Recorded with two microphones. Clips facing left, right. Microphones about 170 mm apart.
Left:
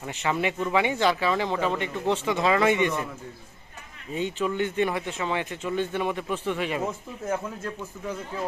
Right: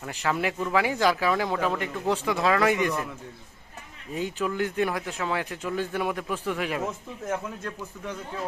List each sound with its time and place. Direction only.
0.0 s speech: centre (ahead or behind)
4.1 s speech: centre (ahead or behind)